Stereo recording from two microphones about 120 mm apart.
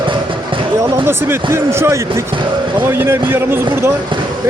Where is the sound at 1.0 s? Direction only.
20° right (ahead or behind).